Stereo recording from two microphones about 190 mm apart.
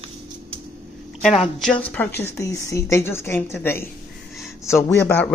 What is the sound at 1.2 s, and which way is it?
A woman's voice, centre (ahead or behind).